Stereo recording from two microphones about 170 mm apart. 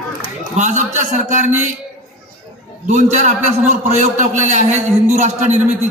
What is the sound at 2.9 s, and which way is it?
A man's voice, 45° right (ahead or behind).